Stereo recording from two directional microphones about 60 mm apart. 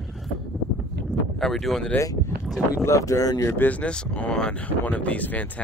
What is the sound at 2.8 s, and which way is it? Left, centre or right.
Speech, left.